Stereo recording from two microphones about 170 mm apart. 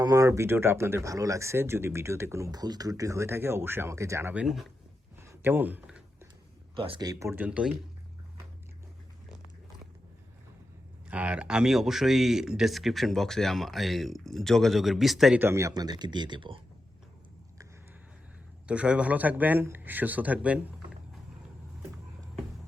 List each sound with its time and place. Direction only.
0.0 s speech: 20° right (ahead or behind); by 4.6 s 5° right (ahead or behind)
5.2 s a sound: 15° right (ahead or behind)
6.7 s speech: 30° right (ahead or behind); by 7.8 s 5° right (ahead or behind)
11.1 s speech: 10° right (ahead or behind)
15.4 s speech: 15° right (ahead or behind)
18.7 s speech: 5° right (ahead or behind)